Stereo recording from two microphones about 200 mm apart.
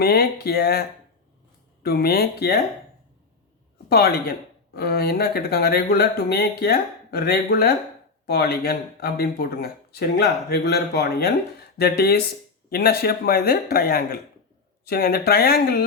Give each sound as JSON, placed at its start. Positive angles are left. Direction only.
{"t": 0.0, "sound": "speech", "side_deg": 50}
{"t": 3.8, "sound": "speech", "side_deg": 50}